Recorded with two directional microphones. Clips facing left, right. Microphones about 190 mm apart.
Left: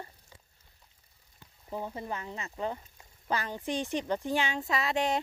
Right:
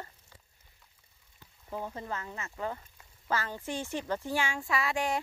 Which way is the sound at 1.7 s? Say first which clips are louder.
Left 1 dB; 15° left (ahead or behind).